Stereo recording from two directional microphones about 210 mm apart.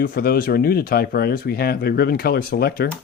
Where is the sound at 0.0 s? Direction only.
45° left (ahead or behind).